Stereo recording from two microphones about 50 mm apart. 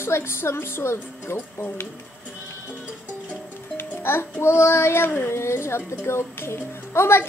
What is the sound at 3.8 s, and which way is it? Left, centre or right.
A woman's voice, left.